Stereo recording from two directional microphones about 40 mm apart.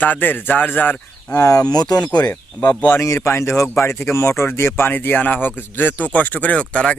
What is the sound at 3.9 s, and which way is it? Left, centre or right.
Speech, left.